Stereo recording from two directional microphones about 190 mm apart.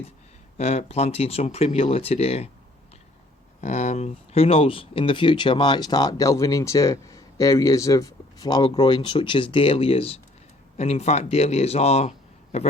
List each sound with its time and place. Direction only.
0.5 s speech: 35° left (ahead or behind)
3.6 s a man's voice: 40° left (ahead or behind)